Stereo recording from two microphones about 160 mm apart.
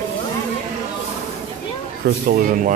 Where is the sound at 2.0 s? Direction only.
80° right.